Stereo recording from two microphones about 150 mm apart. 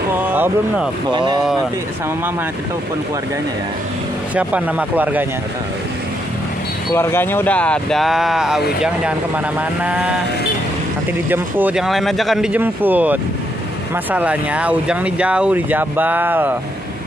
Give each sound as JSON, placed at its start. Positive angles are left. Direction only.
{"t": 0.1, "sound": "speech", "side_deg": -10}
{"t": 1.1, "sound": "speech", "side_deg": -30}
{"t": 4.4, "sound": "speech", "side_deg": -10}
{"t": 6.9, "sound": "speech", "side_deg": 15}
{"t": 11.2, "sound": "speech", "side_deg": -15}
{"t": 12.5, "sound": "speech", "side_deg": -10}